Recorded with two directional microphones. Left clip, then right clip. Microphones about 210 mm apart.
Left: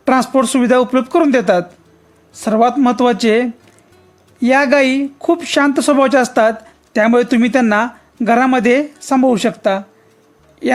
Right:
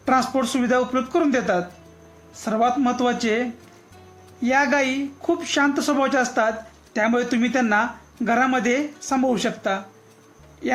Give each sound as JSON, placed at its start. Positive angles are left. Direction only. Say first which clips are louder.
{"t": 0.0, "sound": "speech", "louder": "left 7 dB", "side_deg": 50}